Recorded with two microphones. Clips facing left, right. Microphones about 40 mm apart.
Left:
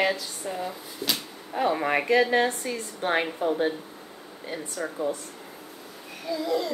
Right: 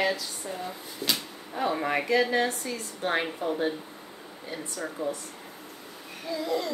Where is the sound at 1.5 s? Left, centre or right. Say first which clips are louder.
Left 3 dB; centre.